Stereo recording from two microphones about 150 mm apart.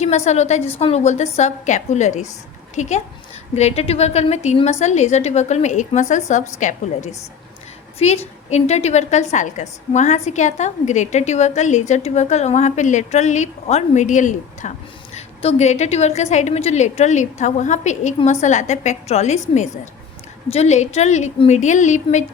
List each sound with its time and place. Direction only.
0.3 s a woman's voice: 50° left (ahead or behind)
7.9 s a woman's voice: 45° left (ahead or behind)
15.1 s a woman's voice: 45° left (ahead or behind)